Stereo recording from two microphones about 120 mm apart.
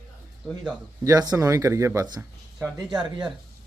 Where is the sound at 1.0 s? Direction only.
30° right (ahead or behind).